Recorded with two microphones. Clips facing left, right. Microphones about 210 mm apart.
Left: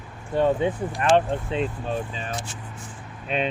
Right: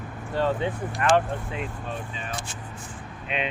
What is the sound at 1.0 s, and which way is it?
Speech, 25° left (ahead or behind).